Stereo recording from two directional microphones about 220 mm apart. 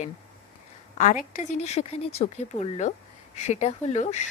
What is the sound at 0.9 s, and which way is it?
A woman's voice, 35° left (ahead or behind).